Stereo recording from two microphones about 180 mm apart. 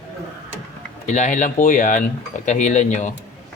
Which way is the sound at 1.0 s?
40° left (ahead or behind).